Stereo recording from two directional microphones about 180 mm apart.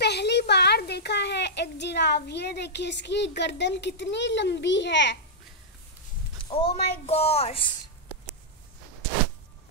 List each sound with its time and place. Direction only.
0.0 s a child's voice: 70° left (ahead or behind)
6.5 s a woman's voice: 35° left (ahead or behind)